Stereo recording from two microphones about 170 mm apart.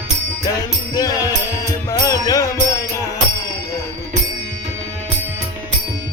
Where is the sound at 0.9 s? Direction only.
20° left (ahead or behind).